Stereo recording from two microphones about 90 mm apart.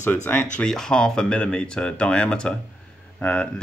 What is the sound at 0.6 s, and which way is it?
Speech, 10° left (ahead or behind).